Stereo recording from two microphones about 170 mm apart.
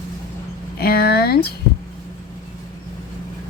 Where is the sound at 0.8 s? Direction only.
65° left (ahead or behind).